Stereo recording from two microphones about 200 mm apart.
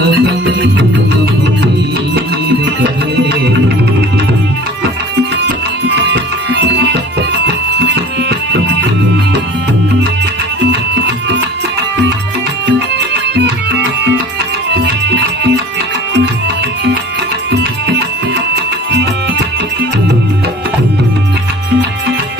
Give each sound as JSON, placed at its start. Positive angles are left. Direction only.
{"t": 0.0, "sound": "music", "side_deg": -55}
{"t": 6.1, "sound": "music", "side_deg": -60}
{"t": 13.3, "sound": "music", "side_deg": -60}
{"t": 15.1, "sound": "music", "side_deg": -55}
{"t": 17.5, "sound": "music", "side_deg": -55}